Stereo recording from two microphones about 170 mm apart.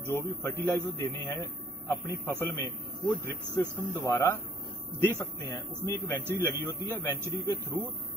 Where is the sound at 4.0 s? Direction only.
20° left (ahead or behind).